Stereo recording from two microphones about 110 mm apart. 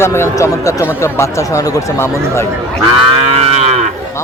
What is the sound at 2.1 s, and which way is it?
Speech, 25° right (ahead or behind).